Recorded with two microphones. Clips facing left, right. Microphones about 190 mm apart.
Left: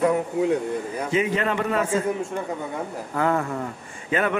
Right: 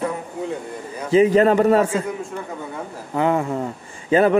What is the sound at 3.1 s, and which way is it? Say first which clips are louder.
Speech: right 4 dB; 20° right (ahead or behind).